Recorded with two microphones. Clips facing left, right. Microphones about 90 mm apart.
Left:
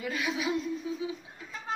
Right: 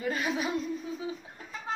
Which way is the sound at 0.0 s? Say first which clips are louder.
Right 2 dB; 40° right (ahead or behind).